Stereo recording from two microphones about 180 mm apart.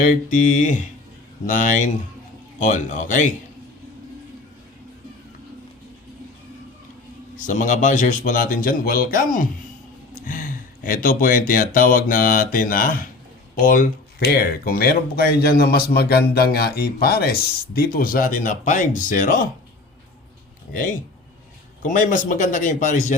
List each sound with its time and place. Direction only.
0.0 s speech: 45° left (ahead or behind)
7.3 s speech: 45° left (ahead or behind)
21.8 s speech: 45° left (ahead or behind)